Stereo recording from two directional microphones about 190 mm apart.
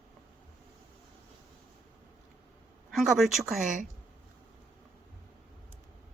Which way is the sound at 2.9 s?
Centre (ahead or behind).